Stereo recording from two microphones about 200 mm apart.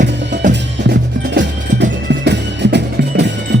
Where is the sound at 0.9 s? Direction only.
60° right (ahead or behind).